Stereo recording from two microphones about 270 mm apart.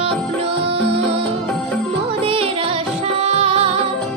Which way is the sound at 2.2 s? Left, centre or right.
Right.